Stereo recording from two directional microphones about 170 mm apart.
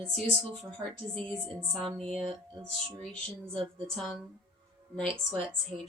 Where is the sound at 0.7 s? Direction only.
5° left (ahead or behind).